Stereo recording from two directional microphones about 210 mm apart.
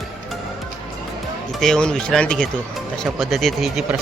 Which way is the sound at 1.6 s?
5° left (ahead or behind).